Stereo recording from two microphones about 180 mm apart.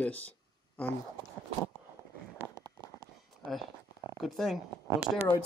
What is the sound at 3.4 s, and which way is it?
Speech, centre (ahead or behind).